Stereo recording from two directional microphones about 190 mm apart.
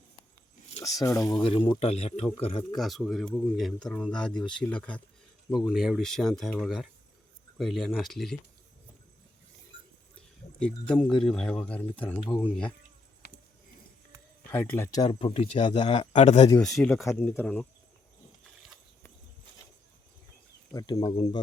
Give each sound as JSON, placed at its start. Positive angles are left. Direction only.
{"t": 0.8, "sound": "speech", "side_deg": 15}
{"t": 2.7, "sound": "speech", "side_deg": 0}
{"t": 10.6, "sound": "speech", "side_deg": 5}
{"t": 13.2, "sound": "a sound", "side_deg": 55}
{"t": 14.5, "sound": "speech", "side_deg": 10}
{"t": 15.0, "sound": "speech", "side_deg": 30}
{"t": 16.6, "sound": "speech", "side_deg": 0}
{"t": 20.7, "sound": "speech", "side_deg": 20}